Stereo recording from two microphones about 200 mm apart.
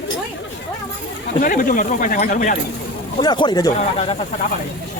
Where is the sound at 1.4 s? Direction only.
45° left (ahead or behind).